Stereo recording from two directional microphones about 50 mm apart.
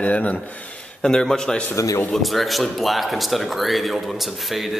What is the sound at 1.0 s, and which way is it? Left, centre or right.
Speech, centre.